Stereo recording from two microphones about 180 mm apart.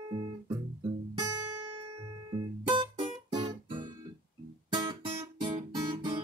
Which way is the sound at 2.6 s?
25° right (ahead or behind).